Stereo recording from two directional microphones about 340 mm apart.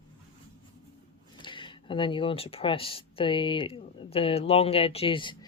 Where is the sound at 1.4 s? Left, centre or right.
Centre.